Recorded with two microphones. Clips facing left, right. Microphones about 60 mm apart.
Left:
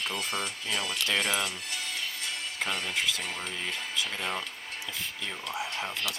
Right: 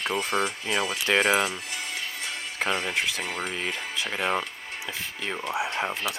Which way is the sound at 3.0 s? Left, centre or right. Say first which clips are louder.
Right 3 dB; right.